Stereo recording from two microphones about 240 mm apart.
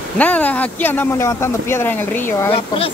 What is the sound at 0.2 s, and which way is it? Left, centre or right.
Speech, centre.